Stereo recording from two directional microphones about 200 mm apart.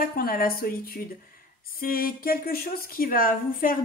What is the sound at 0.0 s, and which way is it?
Speech, 45° left (ahead or behind).